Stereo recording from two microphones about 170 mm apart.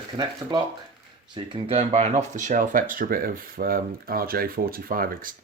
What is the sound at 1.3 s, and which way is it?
Speech, 30° right (ahead or behind).